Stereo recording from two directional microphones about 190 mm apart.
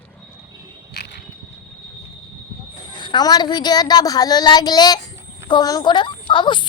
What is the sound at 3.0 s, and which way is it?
A woman's voice, 25° left (ahead or behind).